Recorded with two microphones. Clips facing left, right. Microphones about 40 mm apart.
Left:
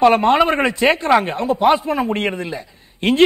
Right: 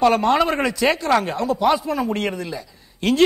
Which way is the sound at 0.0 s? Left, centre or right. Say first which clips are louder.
Left 4 dB; left.